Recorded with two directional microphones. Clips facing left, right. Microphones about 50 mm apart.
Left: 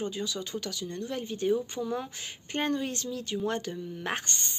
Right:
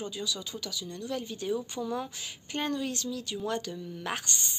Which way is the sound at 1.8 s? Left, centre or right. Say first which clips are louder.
Left 1 dB; centre.